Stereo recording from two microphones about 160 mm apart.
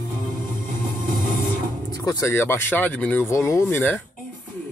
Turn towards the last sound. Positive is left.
turn(degrees=15)  # may be behind; listen again after turning